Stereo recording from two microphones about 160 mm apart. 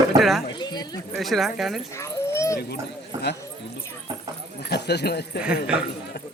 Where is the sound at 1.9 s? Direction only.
20° left (ahead or behind).